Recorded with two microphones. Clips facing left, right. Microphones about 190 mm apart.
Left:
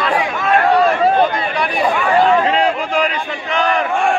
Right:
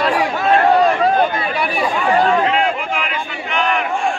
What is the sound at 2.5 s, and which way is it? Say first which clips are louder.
Crowd: left 2 dB; 35° left (ahead or behind).